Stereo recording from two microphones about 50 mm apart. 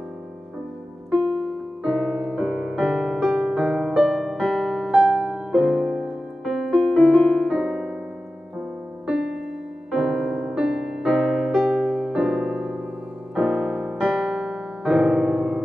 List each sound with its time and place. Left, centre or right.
1.1 s music: right
1.8 s music: centre
6.4 s piano: centre
9.8 s music: centre
11.8 s electric piano: centre
13.3 s piano: centre